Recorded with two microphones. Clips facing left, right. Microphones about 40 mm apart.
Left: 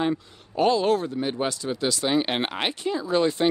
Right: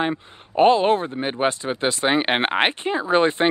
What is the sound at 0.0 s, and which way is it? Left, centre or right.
Speech, right.